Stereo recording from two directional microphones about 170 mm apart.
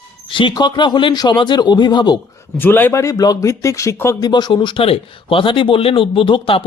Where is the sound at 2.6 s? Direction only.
10° left (ahead or behind).